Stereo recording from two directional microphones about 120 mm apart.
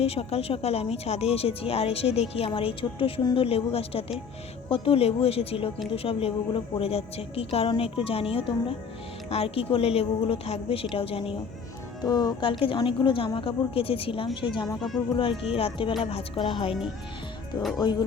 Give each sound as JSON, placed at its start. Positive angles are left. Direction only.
{"t": 0.0, "sound": "a woman's voice", "side_deg": 55}
{"t": 12.0, "sound": "a woman's voice", "side_deg": 35}
{"t": 17.8, "sound": "music", "side_deg": 40}